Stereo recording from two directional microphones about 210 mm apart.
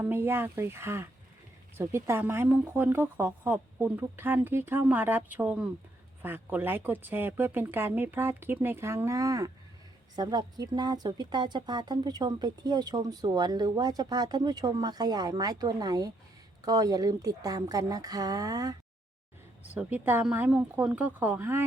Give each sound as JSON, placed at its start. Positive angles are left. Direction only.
{"t": 0.0, "sound": "speech", "side_deg": -10}